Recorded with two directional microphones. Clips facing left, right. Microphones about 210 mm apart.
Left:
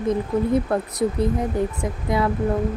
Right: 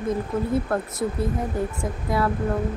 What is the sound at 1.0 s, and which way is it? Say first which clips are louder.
A woman's voice: left 4 dB; 15° left (ahead or behind).